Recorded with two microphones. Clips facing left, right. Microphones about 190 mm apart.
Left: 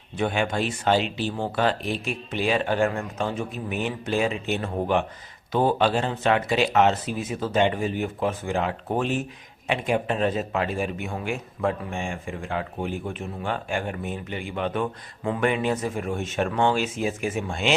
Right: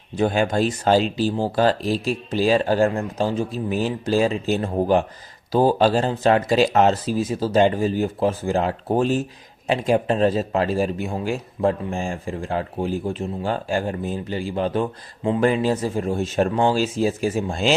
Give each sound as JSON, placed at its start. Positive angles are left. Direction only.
{"t": 0.2, "sound": "a man's voice", "side_deg": -35}